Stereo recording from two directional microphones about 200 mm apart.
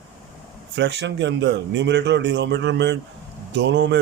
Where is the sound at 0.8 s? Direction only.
60° right (ahead or behind).